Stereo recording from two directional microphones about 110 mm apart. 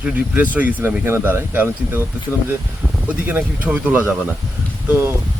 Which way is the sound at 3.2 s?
15° right (ahead or behind).